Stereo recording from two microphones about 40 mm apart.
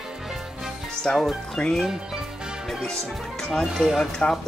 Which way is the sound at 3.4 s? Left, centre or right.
Centre.